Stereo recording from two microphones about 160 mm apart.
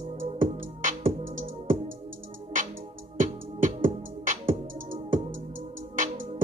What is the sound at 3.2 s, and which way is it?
Music, 55° right (ahead or behind).